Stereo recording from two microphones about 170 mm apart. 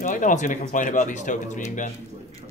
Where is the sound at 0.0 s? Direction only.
50° left (ahead or behind).